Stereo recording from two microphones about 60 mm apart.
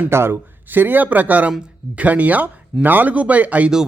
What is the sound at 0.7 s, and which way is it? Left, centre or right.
Speech, right.